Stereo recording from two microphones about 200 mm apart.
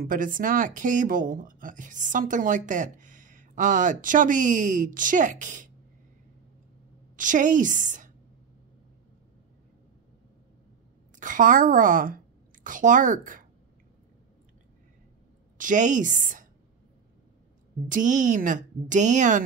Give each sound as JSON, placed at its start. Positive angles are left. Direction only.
{"t": 0.0, "sound": "speech", "side_deg": -45}
{"t": 7.2, "sound": "speech", "side_deg": -40}
{"t": 11.1, "sound": "speech", "side_deg": -40}
{"t": 15.5, "sound": "a woman's voice", "side_deg": -40}
{"t": 17.8, "sound": "speech", "side_deg": -40}